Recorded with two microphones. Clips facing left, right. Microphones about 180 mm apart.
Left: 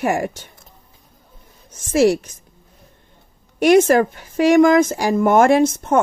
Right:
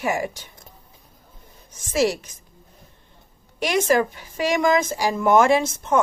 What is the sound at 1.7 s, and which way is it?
Speech, 50° left (ahead or behind).